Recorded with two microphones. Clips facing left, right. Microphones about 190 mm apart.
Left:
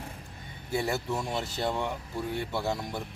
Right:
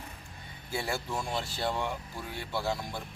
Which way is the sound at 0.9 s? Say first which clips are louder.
Left 3 dB; 20° left (ahead or behind).